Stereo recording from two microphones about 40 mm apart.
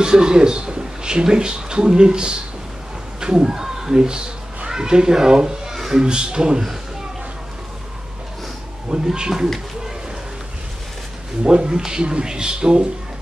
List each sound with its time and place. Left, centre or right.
0.0 s a child's voice: centre
8.8 s speech: right
11.4 s speech: centre